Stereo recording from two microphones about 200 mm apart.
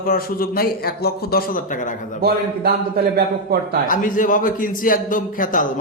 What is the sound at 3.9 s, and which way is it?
A man's voice, 40° left (ahead or behind).